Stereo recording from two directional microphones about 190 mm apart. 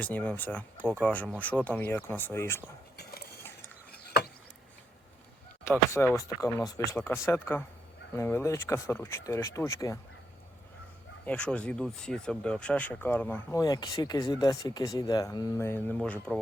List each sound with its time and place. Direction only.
0.0 s speech: 5° left (ahead or behind)
3.0 s mechanisms: 55° left (ahead or behind)
4.0 s a sound: 55° left (ahead or behind)
5.6 s speech: 15° left (ahead or behind)
11.3 s speech: 5° left (ahead or behind)